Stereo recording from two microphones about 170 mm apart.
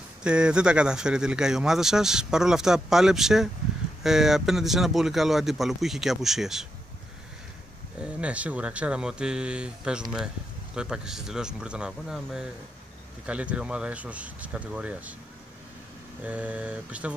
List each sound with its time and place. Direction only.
0.2 s speech: 5° right (ahead or behind)
8.0 s speech: 5° right (ahead or behind)
16.3 s speech: 10° right (ahead or behind)